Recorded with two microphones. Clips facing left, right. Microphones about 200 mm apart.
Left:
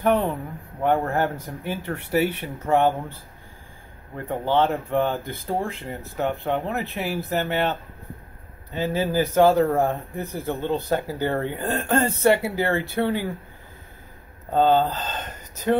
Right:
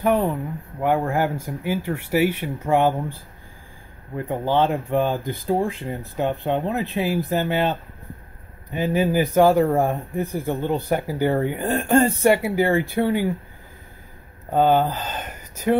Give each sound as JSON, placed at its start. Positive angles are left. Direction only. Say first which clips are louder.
{"t": 0.0, "sound": "speech", "louder": "right 1 dB", "side_deg": -10}
{"t": 4.3, "sound": "speech", "louder": "right 1 dB", "side_deg": -15}
{"t": 8.7, "sound": "speech", "louder": "right 3 dB", "side_deg": -15}
{"t": 14.5, "sound": "speech", "louder": "right 1 dB", "side_deg": -15}